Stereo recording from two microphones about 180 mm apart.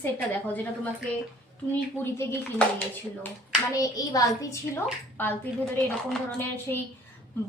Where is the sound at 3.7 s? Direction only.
20° left (ahead or behind).